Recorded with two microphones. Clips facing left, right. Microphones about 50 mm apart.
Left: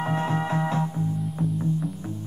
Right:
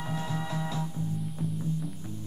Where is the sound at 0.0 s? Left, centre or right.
Left.